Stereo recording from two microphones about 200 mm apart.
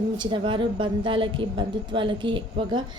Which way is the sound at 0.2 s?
25° right (ahead or behind).